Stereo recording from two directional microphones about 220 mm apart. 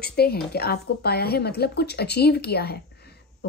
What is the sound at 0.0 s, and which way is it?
A woman's voice, 45° left (ahead or behind).